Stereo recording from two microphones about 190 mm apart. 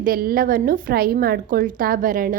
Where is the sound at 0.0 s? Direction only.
50° right (ahead or behind).